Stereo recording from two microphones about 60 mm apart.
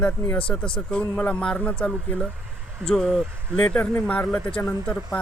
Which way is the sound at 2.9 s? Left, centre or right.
Centre.